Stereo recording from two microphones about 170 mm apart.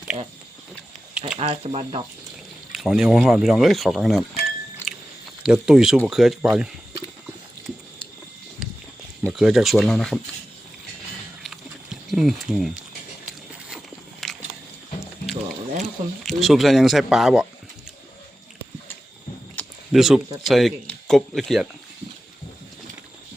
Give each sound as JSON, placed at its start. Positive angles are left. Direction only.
{"t": 1.4, "sound": "speech", "side_deg": -35}
{"t": 2.7, "sound": "speech", "side_deg": 0}
{"t": 9.2, "sound": "speech", "side_deg": -5}
{"t": 11.4, "sound": "a sound", "side_deg": 0}
{"t": 13.7, "sound": "walk", "side_deg": 0}
{"t": 15.3, "sound": "a sound", "side_deg": 0}
{"t": 19.9, "sound": "speech", "side_deg": 0}